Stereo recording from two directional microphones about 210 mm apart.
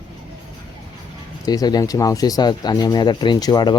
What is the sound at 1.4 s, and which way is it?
Speech, 20° left (ahead or behind).